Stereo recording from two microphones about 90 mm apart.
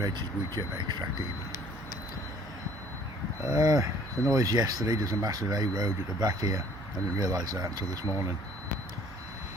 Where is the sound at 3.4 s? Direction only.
40° right (ahead or behind).